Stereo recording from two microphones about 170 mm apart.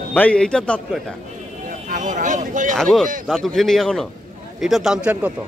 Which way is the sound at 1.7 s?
50° right (ahead or behind).